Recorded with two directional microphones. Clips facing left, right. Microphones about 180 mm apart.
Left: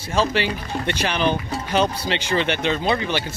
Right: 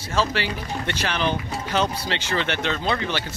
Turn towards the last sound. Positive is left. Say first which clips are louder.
# left 3 dB
turn(degrees=15)  # may be behind; listen again after turning